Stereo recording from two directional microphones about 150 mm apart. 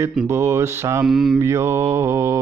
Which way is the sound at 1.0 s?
5° right (ahead or behind).